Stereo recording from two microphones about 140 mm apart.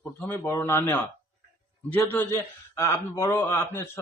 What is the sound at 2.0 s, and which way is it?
A man's voice, 20° left (ahead or behind).